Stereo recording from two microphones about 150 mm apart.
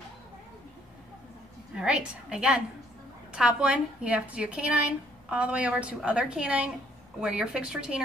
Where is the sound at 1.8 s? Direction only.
5° right (ahead or behind).